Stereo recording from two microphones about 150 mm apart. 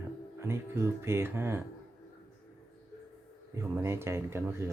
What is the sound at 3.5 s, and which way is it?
Speech, 20° right (ahead or behind).